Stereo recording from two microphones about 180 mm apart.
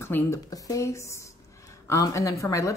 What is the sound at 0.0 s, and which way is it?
Speech, 15° left (ahead or behind).